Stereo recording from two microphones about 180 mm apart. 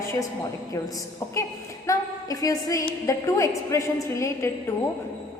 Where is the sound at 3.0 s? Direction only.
15° left (ahead or behind).